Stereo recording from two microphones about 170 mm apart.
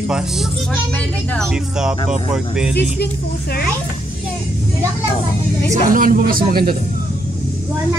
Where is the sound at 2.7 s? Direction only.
70° left (ahead or behind).